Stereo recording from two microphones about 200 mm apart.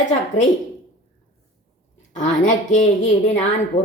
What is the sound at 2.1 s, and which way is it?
Speech, 40° left (ahead or behind).